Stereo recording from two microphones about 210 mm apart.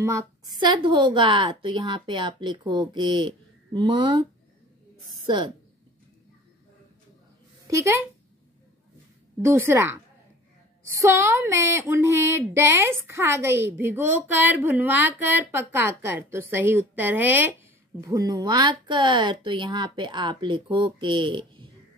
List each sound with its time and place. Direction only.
0.0 s a woman's voice: 15° right (ahead or behind)
7.6 s speech: 15° right (ahead or behind)
9.4 s speech: 10° right (ahead or behind)
11.0 s a woman's voice: 15° right (ahead or behind)